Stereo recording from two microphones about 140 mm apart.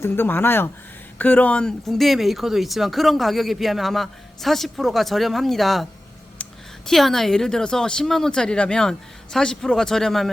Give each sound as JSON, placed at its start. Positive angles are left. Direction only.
{"t": 0.0, "sound": "speech", "side_deg": 15}